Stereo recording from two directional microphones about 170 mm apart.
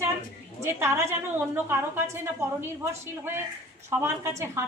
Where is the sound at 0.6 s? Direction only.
15° right (ahead or behind).